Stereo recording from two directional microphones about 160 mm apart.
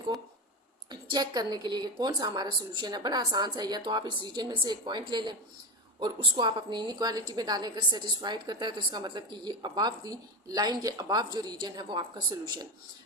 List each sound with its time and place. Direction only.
0.9 s a woman's voice: 25° right (ahead or behind)